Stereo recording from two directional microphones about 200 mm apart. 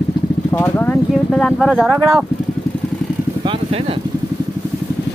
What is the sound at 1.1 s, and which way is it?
Speech, centre (ahead or behind).